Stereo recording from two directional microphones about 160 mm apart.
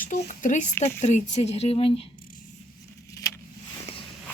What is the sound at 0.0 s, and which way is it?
Speech, 55° left (ahead or behind).